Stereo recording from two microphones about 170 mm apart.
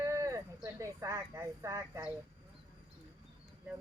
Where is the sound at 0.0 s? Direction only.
15° right (ahead or behind).